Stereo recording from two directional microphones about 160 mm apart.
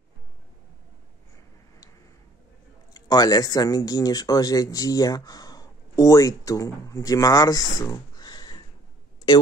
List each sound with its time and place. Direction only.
2.9 s speech: 25° left (ahead or behind)